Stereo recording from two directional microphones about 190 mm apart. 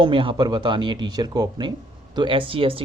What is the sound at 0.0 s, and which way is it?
Speech, 25° right (ahead or behind).